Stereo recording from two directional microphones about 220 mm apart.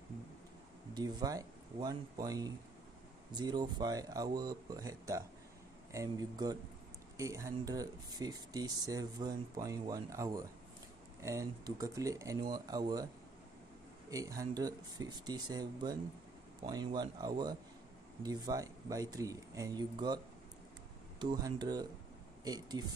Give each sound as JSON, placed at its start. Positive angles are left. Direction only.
{"t": 0.9, "sound": "speech", "side_deg": -15}
{"t": 14.1, "sound": "speech", "side_deg": -15}
{"t": 21.2, "sound": "speech", "side_deg": -20}